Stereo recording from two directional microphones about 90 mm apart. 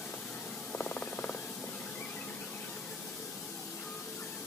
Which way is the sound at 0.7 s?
20° left (ahead or behind).